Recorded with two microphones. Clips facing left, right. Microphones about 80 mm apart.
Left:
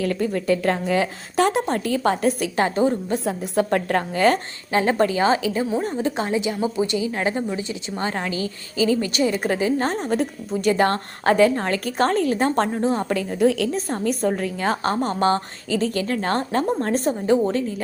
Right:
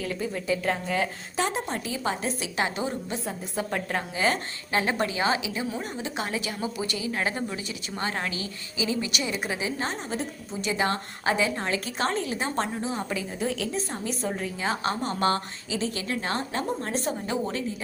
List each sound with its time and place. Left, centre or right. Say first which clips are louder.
0.0 s a woman's voice: left 8 dB; left
2.6 s a woman's voice: left 7 dB; left
3.2 s a woman's voice: left 12 dB; left
4.7 s a woman's voice: left 7 dB; left
6.0 s a woman's voice: left 8 dB; left
6.2 s a woman's voice: left 8 dB; left
13.7 s a woman's voice: left 7 dB; left
14.6 s a woman's voice: left 5 dB; left
15.7 s a woman's voice: left 7 dB; left